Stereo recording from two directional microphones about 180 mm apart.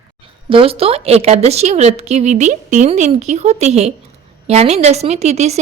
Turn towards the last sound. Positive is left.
turn(degrees=-40)  # may be behind; listen again after turning